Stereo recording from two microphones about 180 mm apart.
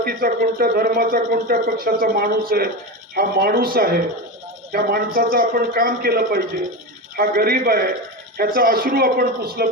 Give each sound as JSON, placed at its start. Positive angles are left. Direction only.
{"t": 0.0, "sound": "speech", "side_deg": -55}